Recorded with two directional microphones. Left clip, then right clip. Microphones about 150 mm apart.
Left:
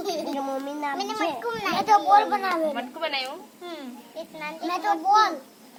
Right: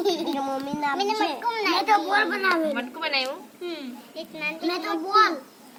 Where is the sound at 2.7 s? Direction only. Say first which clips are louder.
Right 2 dB; 30° left (ahead or behind).